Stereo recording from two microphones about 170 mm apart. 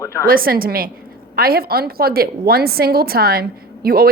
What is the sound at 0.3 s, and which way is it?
A woman's voice, 60° right (ahead or behind).